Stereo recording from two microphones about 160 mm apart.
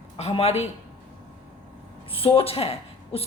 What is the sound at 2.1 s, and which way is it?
A woman's voice, 35° left (ahead or behind).